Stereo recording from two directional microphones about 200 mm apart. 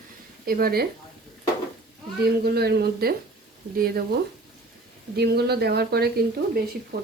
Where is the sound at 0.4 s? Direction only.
50° right (ahead or behind).